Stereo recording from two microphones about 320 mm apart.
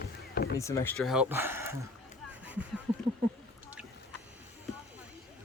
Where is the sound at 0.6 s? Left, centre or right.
Centre.